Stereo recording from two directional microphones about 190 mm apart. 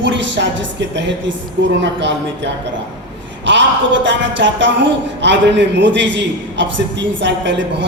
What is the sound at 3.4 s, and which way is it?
A man's voice, 70° right (ahead or behind).